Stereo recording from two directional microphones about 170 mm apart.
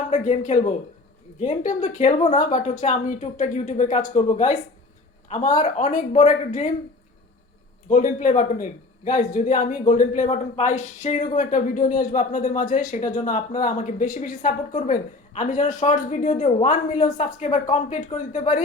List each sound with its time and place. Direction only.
0.1 s speech: 45° left (ahead or behind)
7.9 s speech: 50° left (ahead or behind)